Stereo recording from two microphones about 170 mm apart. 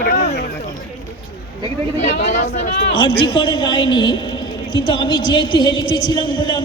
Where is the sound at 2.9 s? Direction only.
30° left (ahead or behind).